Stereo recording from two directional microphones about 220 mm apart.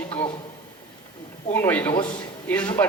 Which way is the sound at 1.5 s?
10° left (ahead or behind).